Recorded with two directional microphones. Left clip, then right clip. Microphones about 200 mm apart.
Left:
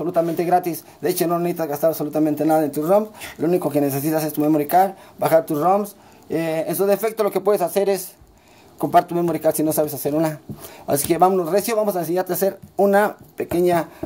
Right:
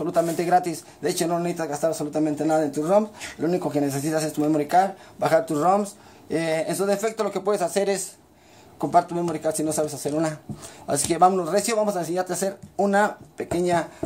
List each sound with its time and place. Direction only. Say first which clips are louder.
0.0 s speech: left 3 dB; 25° left (ahead or behind)
8.7 s speech: left 4 dB; 35° left (ahead or behind)